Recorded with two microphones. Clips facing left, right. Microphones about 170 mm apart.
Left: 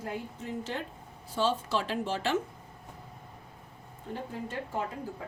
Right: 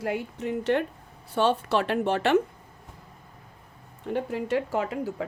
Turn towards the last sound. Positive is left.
turn(degrees=-80)